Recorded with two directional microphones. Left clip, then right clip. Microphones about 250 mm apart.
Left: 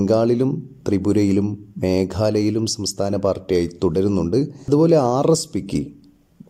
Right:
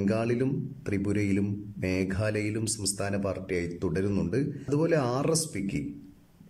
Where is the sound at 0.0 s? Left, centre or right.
Centre.